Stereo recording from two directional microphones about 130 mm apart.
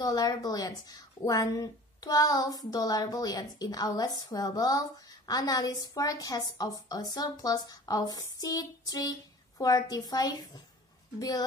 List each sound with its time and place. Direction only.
0.0 s a woman's voice: 30° left (ahead or behind)